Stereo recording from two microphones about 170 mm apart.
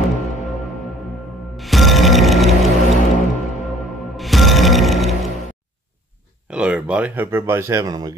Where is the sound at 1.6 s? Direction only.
Centre (ahead or behind).